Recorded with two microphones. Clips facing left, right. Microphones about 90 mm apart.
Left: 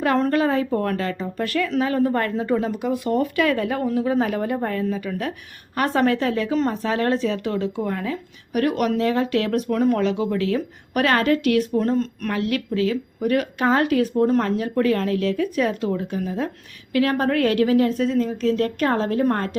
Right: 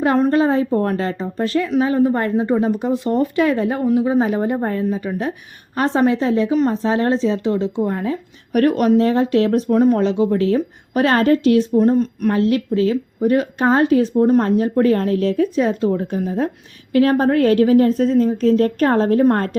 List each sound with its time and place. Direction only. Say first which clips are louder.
0.3 s speech: right 4 dB; 25° right (ahead or behind)
8.5 s a woman's voice: right 6 dB; 40° right (ahead or behind); by 12.3 s 20° right (ahead or behind)
12.3 s a woman's voice: right 7 dB; 30° right (ahead or behind)